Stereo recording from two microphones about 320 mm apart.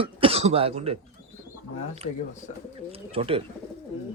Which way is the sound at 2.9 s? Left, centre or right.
Centre.